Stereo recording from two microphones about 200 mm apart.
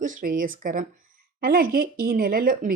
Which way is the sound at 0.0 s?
40° right (ahead or behind).